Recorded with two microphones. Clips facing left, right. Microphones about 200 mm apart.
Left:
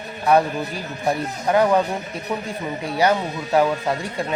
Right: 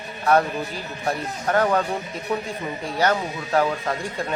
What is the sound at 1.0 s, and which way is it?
Speech, 20° left (ahead or behind).